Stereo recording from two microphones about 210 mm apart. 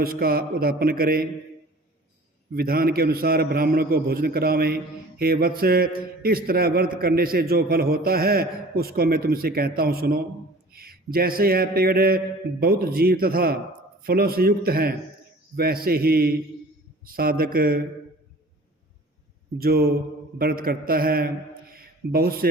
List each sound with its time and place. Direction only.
0.0 s a man's voice: 45° right (ahead or behind)
2.5 s a man's voice: 45° right (ahead or behind)
19.5 s a man's voice: 45° right (ahead or behind)